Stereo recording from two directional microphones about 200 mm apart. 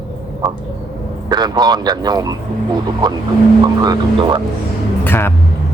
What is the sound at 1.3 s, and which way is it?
Speech, 20° right (ahead or behind).